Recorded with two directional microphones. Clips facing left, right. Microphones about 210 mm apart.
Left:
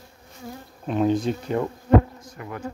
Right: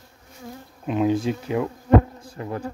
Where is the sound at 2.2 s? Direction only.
30° right (ahead or behind).